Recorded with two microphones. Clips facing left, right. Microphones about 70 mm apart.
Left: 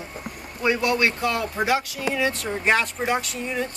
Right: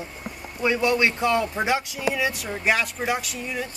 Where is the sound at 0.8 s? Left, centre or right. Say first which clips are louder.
Right 4 dB; centre.